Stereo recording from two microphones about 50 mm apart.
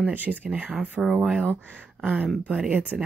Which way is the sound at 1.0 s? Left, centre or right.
Centre.